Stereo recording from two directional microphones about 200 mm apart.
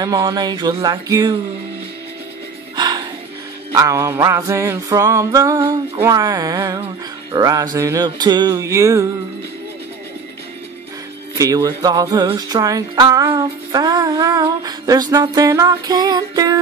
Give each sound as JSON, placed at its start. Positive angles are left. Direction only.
{"t": 0.0, "sound": "music", "side_deg": -20}
{"t": 2.7, "sound": "music", "side_deg": -20}
{"t": 11.3, "sound": "music", "side_deg": -15}